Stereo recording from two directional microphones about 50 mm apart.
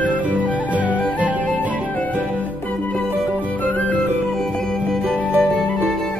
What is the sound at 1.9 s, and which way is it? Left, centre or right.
Music, left.